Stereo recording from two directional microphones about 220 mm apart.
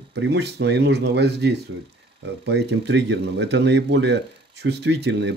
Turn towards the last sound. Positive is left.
turn(degrees=-50)  # may be behind; listen again after turning